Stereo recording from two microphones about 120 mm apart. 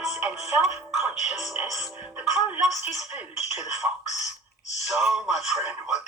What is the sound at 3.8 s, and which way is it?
Speech, 20° right (ahead or behind).